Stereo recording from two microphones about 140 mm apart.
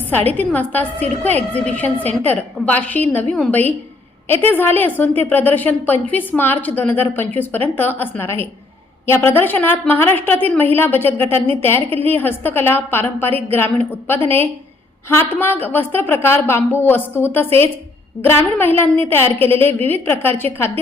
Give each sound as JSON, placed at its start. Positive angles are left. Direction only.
{"t": 0.3, "sound": "a woman's voice", "side_deg": 10}